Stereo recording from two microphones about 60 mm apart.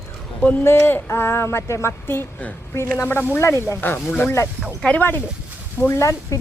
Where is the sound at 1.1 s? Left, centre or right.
Left.